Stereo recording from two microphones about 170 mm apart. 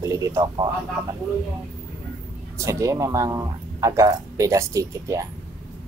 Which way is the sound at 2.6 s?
20° right (ahead or behind).